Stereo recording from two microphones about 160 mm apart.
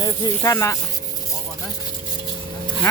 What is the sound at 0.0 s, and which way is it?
Speech, 25° left (ahead or behind).